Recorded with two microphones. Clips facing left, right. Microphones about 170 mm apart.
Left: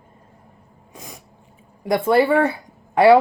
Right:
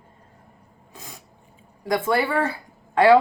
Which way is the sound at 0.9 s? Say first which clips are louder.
Left 3 dB; 15° left (ahead or behind).